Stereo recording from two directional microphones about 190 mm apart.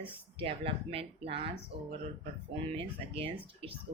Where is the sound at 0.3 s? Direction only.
30° right (ahead or behind).